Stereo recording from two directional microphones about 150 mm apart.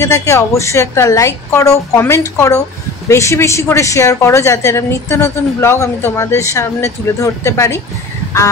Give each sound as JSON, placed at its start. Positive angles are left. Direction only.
{"t": 0.0, "sound": "a woman's voice", "side_deg": 20}